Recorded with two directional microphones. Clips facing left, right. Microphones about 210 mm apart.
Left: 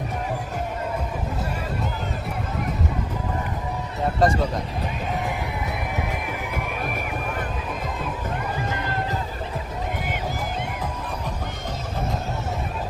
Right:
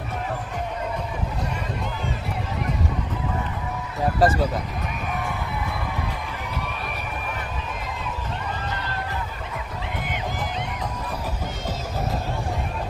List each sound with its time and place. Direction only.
4.2 s speech: centre (ahead or behind)
5.1 s crowd: 20° left (ahead or behind)